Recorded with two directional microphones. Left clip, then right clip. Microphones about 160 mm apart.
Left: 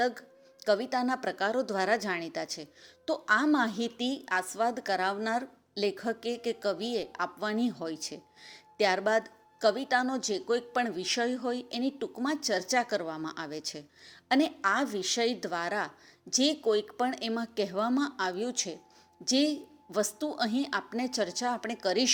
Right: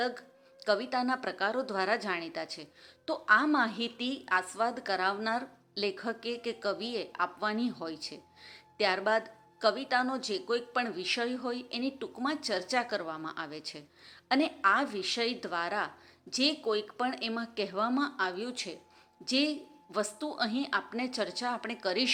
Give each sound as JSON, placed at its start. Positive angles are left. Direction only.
{"t": 0.0, "sound": "a woman's voice", "side_deg": 45}